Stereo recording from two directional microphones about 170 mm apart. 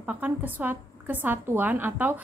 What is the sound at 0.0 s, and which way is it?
A woman's voice, 10° right (ahead or behind).